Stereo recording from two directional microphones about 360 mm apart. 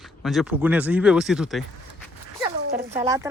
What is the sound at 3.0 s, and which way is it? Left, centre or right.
Speech, centre.